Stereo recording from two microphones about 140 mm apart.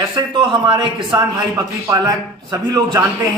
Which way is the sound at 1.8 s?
25° right (ahead or behind).